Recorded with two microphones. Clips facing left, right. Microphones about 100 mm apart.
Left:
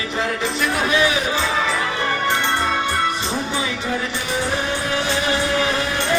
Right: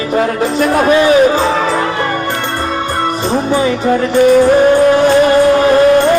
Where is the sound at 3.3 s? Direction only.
50° right (ahead or behind).